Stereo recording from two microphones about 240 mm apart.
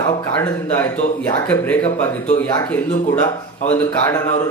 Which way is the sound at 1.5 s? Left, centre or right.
Centre.